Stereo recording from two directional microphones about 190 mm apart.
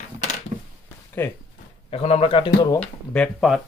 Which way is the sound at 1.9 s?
30° left (ahead or behind).